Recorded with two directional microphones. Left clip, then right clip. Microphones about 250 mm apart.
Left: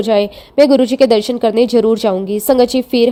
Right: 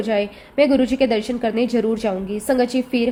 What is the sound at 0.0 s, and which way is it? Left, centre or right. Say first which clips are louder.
A woman's voice: left 7 dB; left.